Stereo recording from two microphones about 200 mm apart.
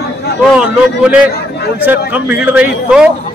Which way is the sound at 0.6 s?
5° right (ahead or behind).